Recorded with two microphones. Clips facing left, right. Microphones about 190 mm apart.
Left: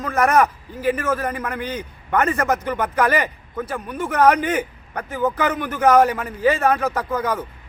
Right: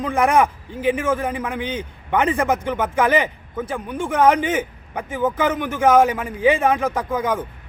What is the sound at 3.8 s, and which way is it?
Speech, 25° right (ahead or behind).